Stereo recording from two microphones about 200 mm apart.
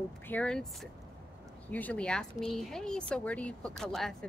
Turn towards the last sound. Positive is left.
turn(degrees=0)  # may be behind; listen again after turning